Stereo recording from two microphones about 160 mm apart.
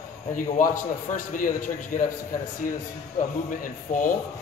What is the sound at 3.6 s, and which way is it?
Speech, 55° left (ahead or behind).